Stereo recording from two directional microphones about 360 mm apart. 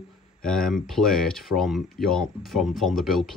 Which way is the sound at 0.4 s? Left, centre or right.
Centre.